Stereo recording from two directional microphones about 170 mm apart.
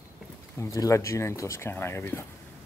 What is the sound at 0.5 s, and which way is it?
Speech, 15° left (ahead or behind).